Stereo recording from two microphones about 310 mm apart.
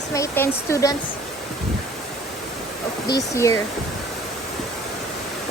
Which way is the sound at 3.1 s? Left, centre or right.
Centre.